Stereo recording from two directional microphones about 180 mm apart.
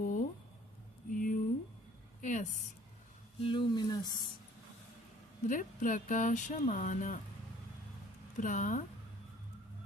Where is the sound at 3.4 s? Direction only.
25° left (ahead or behind).